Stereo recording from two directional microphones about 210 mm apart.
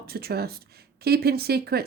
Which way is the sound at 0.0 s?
45° right (ahead or behind).